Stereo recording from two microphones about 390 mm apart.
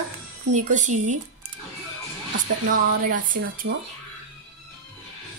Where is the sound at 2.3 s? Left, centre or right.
Right.